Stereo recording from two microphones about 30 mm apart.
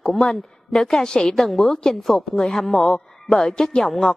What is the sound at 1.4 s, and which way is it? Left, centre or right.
Speech, centre.